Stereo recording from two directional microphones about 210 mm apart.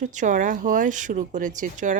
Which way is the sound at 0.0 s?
35° right (ahead or behind).